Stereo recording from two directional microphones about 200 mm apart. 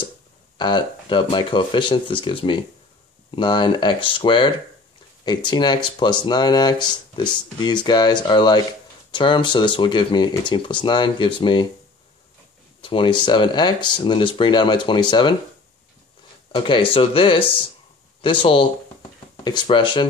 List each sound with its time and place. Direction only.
0.6 s speech: 20° left (ahead or behind)
12.8 s speech: 25° left (ahead or behind)
16.5 s speech: 25° left (ahead or behind)